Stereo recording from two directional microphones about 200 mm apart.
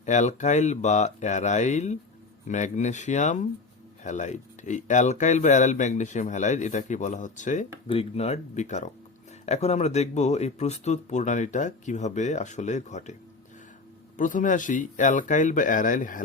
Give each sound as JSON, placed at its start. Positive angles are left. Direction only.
{"t": 0.0, "sound": "speech", "side_deg": 35}
{"t": 14.2, "sound": "speech", "side_deg": 40}